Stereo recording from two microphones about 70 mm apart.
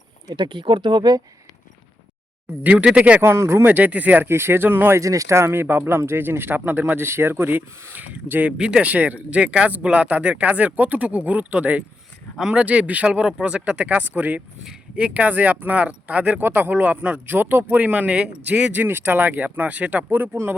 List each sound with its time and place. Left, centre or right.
0.3 s speech: right
2.6 s speech: centre
3.2 s speech: right
3.6 s speech: right
4.3 s speech: right
4.9 s speech: right
8.5 s speech: centre; by 20.6 s right